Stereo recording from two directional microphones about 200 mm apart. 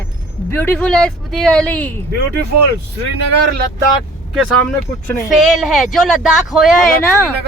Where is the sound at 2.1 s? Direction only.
50° right (ahead or behind).